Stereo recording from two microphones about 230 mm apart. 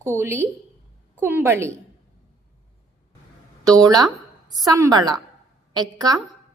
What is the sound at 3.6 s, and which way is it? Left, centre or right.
A woman's voice, centre.